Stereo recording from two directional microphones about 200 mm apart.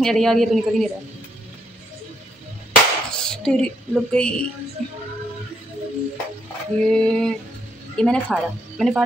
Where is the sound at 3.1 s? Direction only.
5° left (ahead or behind).